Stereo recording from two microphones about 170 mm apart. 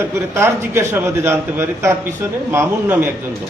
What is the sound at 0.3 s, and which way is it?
A man's voice, 15° right (ahead or behind).